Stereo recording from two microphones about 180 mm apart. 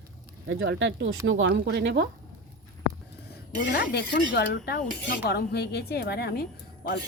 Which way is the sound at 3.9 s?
60° left (ahead or behind).